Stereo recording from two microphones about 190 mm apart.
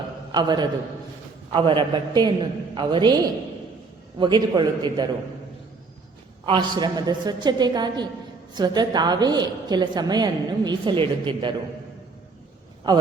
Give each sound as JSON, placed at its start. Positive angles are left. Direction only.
{"t": 0.3, "sound": "a man's voice", "side_deg": -20}
{"t": 4.2, "sound": "a woman's voice", "side_deg": -25}
{"t": 6.4, "sound": "a woman's voice", "side_deg": -25}